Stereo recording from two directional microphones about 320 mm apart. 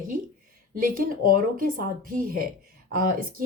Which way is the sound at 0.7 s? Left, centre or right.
Right.